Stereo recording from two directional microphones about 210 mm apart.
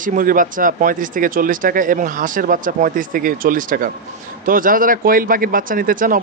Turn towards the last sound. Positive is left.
turn(degrees=-40)  # may be behind; listen again after turning